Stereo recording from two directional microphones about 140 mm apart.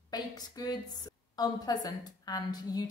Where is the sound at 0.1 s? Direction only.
30° left (ahead or behind).